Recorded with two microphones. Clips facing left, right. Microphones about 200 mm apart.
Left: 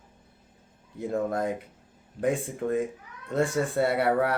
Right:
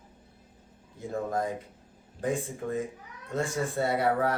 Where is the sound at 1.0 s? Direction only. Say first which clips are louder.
Left 3 dB; 65° left (ahead or behind).